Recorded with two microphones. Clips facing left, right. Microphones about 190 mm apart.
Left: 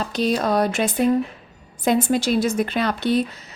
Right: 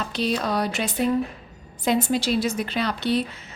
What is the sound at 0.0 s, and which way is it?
Speech, 45° left (ahead or behind).